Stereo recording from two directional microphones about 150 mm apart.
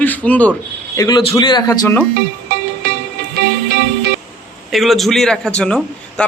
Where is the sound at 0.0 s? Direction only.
10° left (ahead or behind).